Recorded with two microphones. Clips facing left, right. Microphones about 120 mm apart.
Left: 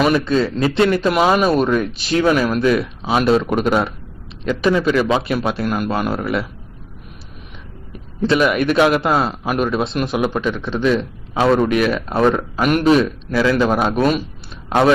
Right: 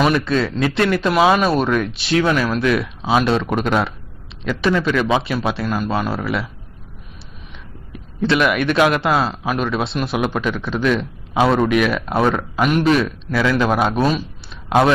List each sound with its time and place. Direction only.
0.0 s a man's voice: centre (ahead or behind)
8.2 s speech: 35° left (ahead or behind)
8.4 s a man's voice: 5° left (ahead or behind)
12.8 s speech: 35° left (ahead or behind)
13.3 s speech: 5° left (ahead or behind)